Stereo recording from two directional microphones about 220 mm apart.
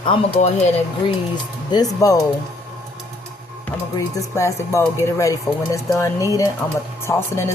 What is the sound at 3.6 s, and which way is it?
Speech, 15° left (ahead or behind).